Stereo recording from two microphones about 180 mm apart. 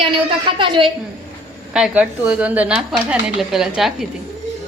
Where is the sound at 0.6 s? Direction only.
25° right (ahead or behind).